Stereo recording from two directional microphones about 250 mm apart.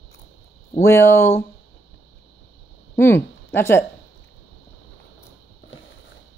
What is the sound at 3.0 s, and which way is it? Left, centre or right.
Speech, centre.